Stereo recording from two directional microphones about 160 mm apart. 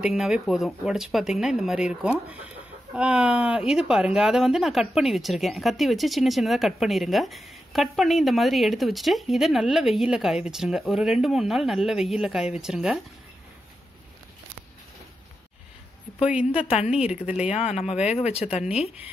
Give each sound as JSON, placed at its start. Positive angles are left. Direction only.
{"t": 0.0, "sound": "speech", "side_deg": -5}
{"t": 16.2, "sound": "a woman's voice", "side_deg": -5}
{"t": 17.6, "sound": "speech", "side_deg": 40}